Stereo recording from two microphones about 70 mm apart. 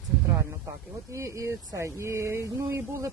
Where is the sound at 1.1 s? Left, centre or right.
Right.